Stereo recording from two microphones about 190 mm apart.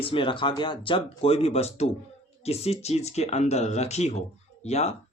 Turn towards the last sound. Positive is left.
turn(degrees=35)  # may be behind; listen again after turning